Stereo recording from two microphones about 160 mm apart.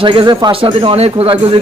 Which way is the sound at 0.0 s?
30° right (ahead or behind).